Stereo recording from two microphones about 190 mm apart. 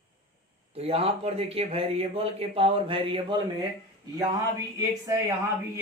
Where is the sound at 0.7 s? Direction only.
30° right (ahead or behind).